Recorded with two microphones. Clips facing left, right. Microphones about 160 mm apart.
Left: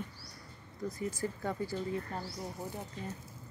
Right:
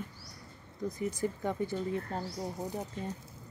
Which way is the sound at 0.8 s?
20° right (ahead or behind).